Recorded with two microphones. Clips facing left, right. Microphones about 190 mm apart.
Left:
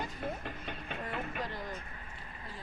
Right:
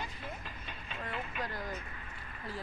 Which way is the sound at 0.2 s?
55° left (ahead or behind).